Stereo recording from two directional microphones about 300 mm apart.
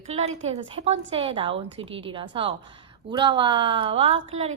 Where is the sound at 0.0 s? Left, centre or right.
Right.